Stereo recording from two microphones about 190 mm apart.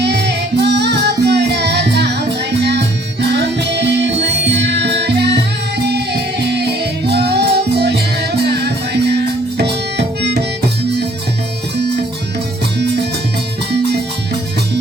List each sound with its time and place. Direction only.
0.0 s music: 60° right (ahead or behind)